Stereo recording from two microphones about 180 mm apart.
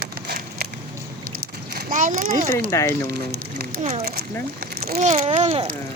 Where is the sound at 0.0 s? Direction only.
60° right (ahead or behind).